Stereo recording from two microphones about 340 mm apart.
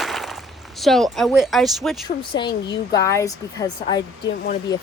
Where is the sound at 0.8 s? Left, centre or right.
Centre.